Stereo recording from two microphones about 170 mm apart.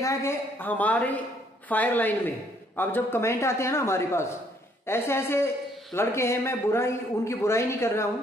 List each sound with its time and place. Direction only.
0.0 s a man's voice: 15° left (ahead or behind)